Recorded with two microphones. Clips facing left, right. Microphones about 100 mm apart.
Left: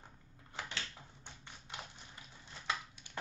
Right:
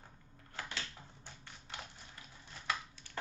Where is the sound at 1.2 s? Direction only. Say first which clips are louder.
Even; 20° left (ahead or behind).